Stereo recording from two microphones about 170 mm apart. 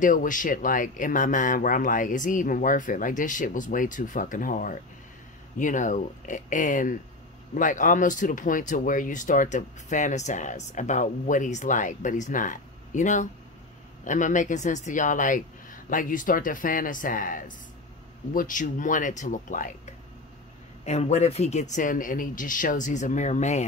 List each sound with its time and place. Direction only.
0.0 s speech: 50° left (ahead or behind)
20.8 s speech: 40° left (ahead or behind)